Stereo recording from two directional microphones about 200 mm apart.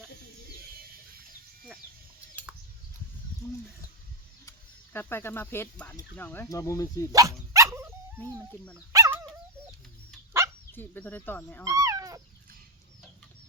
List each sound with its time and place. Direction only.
4.9 s speech: 10° left (ahead or behind)
7.1 s dog: 15° right (ahead or behind)
8.2 s speech: 5° left (ahead or behind)
8.9 s dog: 15° right (ahead or behind)
10.3 s dog: 15° right (ahead or behind)
10.7 s speech: 10° left (ahead or behind)
11.6 s speech: 15° right (ahead or behind)